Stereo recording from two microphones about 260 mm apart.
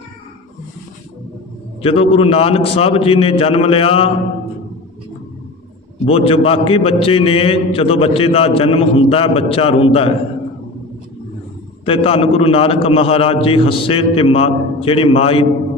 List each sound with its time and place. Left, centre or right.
1.8 s a man's voice: left
6.1 s a man's voice: left
11.9 s a man's voice: left